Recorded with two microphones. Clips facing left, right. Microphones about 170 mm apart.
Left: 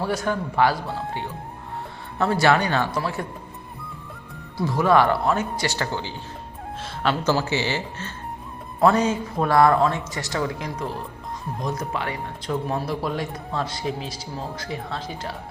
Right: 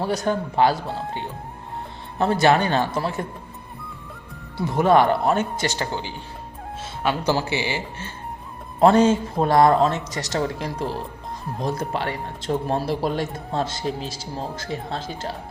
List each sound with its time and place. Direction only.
0.3 s speech: 25° right (ahead or behind)
2.1 s speech: 20° right (ahead or behind)
4.5 s speech: 25° right (ahead or behind)
8.8 s speech: 25° right (ahead or behind)